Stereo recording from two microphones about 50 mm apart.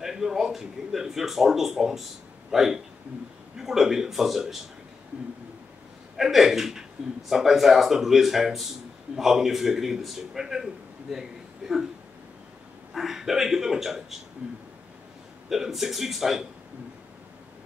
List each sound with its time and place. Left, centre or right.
0.0 s speech: centre
6.1 s a man's voice: centre
12.9 s speech: centre
14.4 s speech: right
15.5 s speech: centre